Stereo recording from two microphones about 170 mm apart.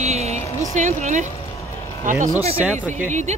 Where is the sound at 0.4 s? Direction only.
20° left (ahead or behind).